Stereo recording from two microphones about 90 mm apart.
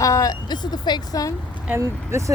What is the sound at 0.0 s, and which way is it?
Speech, 40° left (ahead or behind).